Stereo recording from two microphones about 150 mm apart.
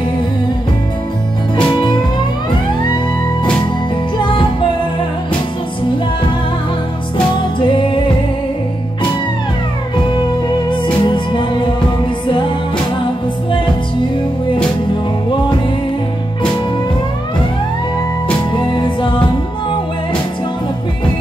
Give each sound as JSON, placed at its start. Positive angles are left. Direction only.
{"t": 4.2, "sound": "music", "side_deg": 35}
{"t": 7.5, "sound": "music", "side_deg": 35}
{"t": 10.7, "sound": "music", "side_deg": 30}
{"t": 18.5, "sound": "music", "side_deg": 30}